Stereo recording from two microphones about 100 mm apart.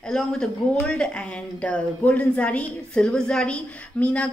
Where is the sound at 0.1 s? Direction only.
5° left (ahead or behind).